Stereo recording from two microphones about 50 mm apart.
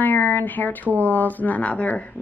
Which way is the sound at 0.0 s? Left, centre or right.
Left.